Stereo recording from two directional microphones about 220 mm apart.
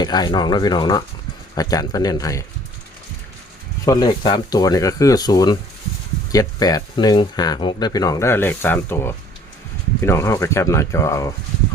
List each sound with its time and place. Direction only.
0.0 s speech: 20° left (ahead or behind)
3.8 s speech: 20° left (ahead or behind)